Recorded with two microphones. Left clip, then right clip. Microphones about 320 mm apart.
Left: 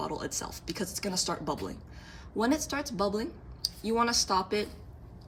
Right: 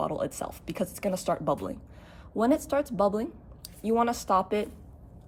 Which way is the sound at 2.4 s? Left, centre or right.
Centre.